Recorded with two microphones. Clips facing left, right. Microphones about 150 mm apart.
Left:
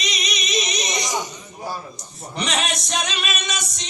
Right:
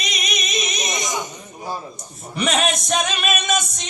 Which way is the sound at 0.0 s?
50° right (ahead or behind).